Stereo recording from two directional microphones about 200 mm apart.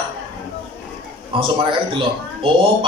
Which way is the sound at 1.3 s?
25° right (ahead or behind).